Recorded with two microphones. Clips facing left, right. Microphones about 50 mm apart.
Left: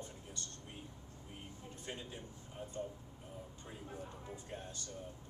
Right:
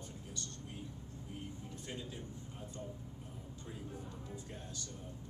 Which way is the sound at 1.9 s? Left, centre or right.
Left.